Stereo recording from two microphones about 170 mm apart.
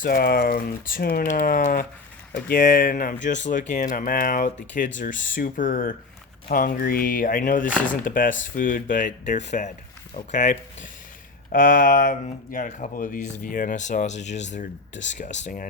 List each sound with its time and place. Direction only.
0.0 s speech: 60° left (ahead or behind)
1.3 s speech: 50° left (ahead or behind)